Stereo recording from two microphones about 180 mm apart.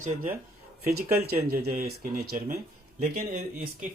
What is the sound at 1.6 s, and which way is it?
Speech, 60° right (ahead or behind).